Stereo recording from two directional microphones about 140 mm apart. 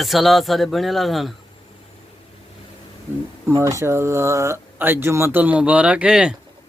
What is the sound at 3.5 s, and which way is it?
Speech, 25° right (ahead or behind).